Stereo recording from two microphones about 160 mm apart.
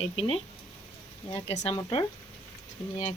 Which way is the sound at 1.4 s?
40° left (ahead or behind).